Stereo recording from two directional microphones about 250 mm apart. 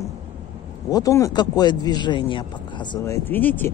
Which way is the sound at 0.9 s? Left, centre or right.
Centre.